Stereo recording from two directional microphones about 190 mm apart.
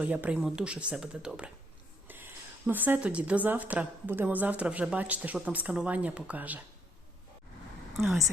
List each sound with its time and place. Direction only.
0.0 s a woman's voice: 10° right (ahead or behind)